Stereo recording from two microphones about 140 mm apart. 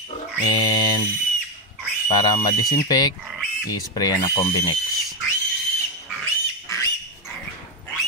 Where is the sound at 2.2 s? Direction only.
25° left (ahead or behind).